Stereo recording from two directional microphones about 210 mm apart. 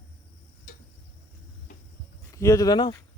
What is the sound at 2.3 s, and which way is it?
Speech, 15° left (ahead or behind).